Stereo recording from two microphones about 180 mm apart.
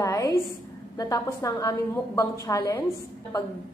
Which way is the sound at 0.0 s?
20° left (ahead or behind).